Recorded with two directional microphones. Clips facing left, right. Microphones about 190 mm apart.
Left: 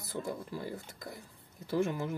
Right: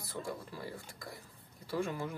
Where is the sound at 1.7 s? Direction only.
20° left (ahead or behind).